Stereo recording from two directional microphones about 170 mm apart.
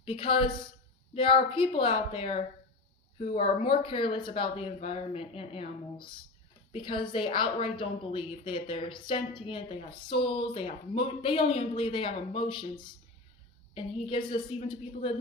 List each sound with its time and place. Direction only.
0.0 s a woman's voice: 30° left (ahead or behind)